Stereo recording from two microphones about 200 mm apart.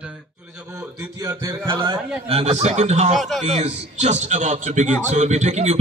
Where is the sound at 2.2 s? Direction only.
30° right (ahead or behind).